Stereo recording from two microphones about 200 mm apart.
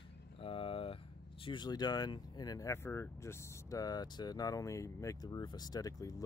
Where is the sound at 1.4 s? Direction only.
25° left (ahead or behind).